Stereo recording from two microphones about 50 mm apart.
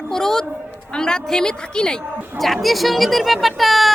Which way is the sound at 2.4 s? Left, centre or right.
Centre.